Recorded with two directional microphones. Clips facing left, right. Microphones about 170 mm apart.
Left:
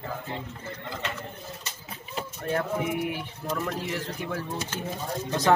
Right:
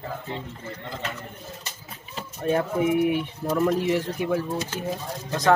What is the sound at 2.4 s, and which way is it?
Speech, 20° right (ahead or behind).